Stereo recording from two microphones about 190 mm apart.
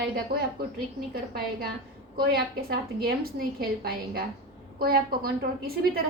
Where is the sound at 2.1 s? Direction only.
55° right (ahead or behind).